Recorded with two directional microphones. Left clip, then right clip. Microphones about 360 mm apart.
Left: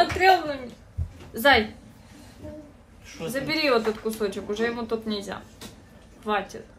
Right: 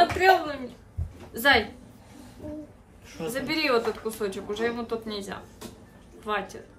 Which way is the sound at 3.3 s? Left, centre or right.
Centre.